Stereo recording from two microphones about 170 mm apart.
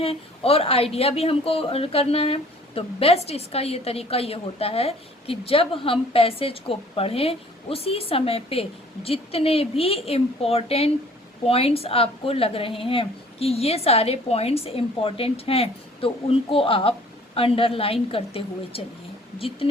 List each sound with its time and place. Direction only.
0.0 s speech: 35° left (ahead or behind)